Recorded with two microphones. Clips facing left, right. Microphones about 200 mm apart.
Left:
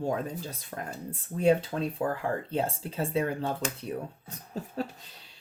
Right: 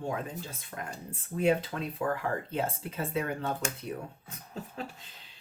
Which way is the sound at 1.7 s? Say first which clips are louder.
Left 2 dB; 25° left (ahead or behind).